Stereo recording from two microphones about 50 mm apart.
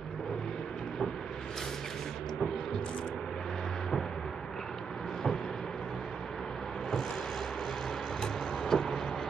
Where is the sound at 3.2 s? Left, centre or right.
Centre.